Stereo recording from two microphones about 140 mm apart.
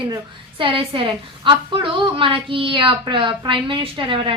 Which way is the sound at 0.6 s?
40° right (ahead or behind).